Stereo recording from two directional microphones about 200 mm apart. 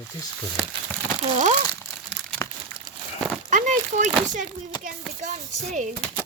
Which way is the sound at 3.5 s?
40° right (ahead or behind).